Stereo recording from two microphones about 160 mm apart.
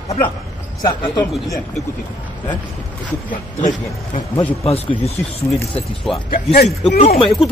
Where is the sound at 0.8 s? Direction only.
20° left (ahead or behind).